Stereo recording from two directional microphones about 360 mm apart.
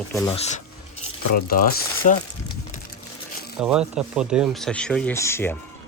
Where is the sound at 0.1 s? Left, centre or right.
Centre.